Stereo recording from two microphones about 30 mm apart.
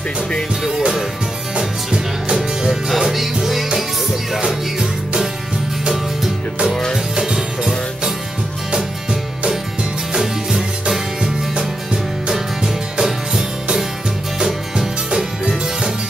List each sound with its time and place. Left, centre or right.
0.7 s music: centre
3.0 s music: centre
4.5 s music: centre
11.5 s music: right